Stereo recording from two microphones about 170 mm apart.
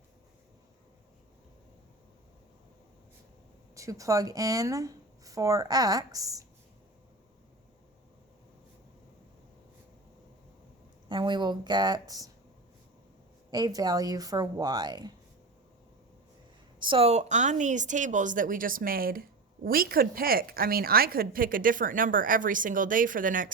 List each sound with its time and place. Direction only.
3.8 s speech: 20° right (ahead or behind)
11.1 s speech: 25° right (ahead or behind)
13.5 s speech: 20° right (ahead or behind)
16.8 s a woman's voice: 30° right (ahead or behind); by 23.5 s 50° right (ahead or behind)